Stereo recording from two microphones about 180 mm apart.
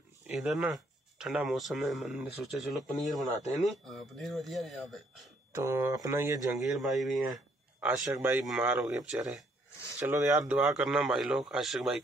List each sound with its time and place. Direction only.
0.4 s speech: centre (ahead or behind)
5.5 s speech: 15° right (ahead or behind)
6.6 s speech: centre (ahead or behind)
9.9 s speech: 15° right (ahead or behind)